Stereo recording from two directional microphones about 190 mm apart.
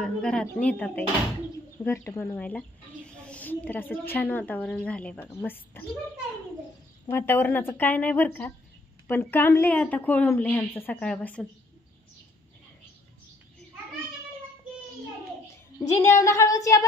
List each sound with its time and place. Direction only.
0.0 s a woman's voice: 5° left (ahead or behind)
7.1 s a woman's voice: 15° left (ahead or behind)
16.0 s a woman's voice: 15° left (ahead or behind)